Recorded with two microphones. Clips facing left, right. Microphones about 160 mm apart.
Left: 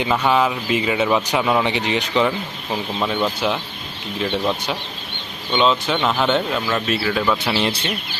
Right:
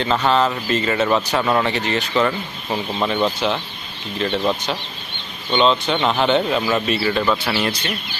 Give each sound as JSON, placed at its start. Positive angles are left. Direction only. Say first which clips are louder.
{"t": 0.0, "sound": "speech", "louder": "even", "side_deg": 10}
{"t": 3.0, "sound": "speech", "louder": "right 2 dB", "side_deg": -5}
{"t": 4.2, "sound": "speech", "louder": "right 1 dB", "side_deg": 5}
{"t": 7.4, "sound": "speech", "louder": "left 1 dB", "side_deg": 20}